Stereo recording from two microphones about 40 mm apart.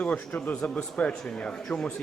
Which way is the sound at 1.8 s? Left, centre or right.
Centre.